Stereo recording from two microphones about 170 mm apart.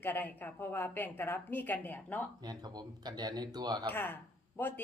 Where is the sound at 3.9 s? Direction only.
10° left (ahead or behind).